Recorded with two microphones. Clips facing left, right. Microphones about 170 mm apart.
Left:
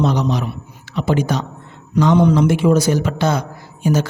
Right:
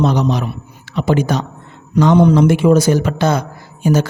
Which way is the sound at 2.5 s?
60° right (ahead or behind).